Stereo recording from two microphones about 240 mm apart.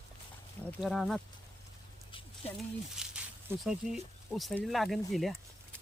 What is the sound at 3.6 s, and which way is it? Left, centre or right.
Speech, centre.